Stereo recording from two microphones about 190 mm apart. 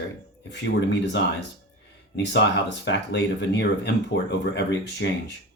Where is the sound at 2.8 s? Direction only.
65° left (ahead or behind).